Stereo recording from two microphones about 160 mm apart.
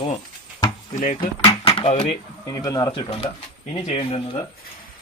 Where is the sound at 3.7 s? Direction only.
40° left (ahead or behind).